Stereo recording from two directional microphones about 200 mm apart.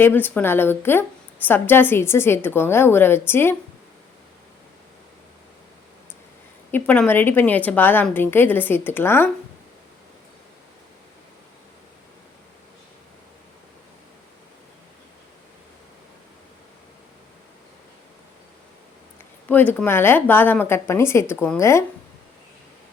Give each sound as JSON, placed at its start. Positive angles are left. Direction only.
{"t": 0.0, "sound": "a woman's voice", "side_deg": 10}
{"t": 6.7, "sound": "a woman's voice", "side_deg": 10}
{"t": 19.5, "sound": "a woman's voice", "side_deg": 10}